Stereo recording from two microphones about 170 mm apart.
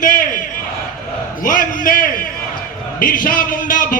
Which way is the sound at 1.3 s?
55° left (ahead or behind).